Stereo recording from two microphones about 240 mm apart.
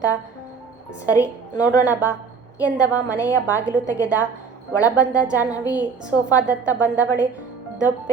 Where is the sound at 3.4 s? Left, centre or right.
Centre.